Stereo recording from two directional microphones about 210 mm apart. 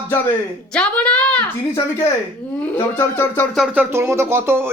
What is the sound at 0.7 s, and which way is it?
A woman's voice, 5° left (ahead or behind).